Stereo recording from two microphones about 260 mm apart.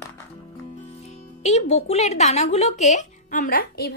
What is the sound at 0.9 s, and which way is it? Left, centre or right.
Speech, left.